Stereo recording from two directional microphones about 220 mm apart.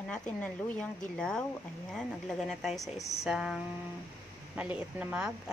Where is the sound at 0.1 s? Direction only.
5° left (ahead or behind).